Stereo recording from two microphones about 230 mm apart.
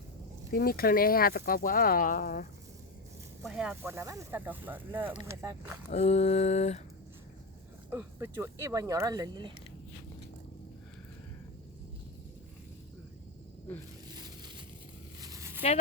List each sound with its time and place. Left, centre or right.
0.5 s speech: left
3.4 s speech: centre
5.9 s mantra: left
7.9 s speech: centre
14.1 s crushing: centre
15.2 s a sound: centre